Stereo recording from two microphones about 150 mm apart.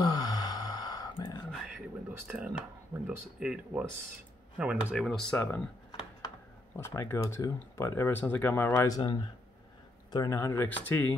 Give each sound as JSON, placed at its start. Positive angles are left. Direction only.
{"t": 0.0, "sound": "gasp", "side_deg": 25}
{"t": 1.7, "sound": "a sound", "side_deg": -10}
{"t": 3.3, "sound": "speech", "side_deg": -5}
{"t": 5.0, "sound": "speech", "side_deg": 5}
{"t": 5.9, "sound": "a sound", "side_deg": 30}
{"t": 6.8, "sound": "speech", "side_deg": 15}